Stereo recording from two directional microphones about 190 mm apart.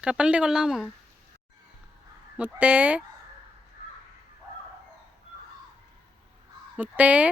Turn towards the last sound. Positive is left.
turn(degrees=-5)  # may be behind; listen again after turning